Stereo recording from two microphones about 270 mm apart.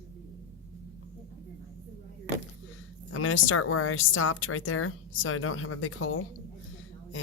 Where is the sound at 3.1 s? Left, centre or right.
Left.